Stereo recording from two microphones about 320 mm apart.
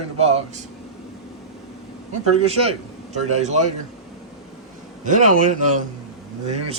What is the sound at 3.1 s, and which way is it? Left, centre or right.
Speech, right.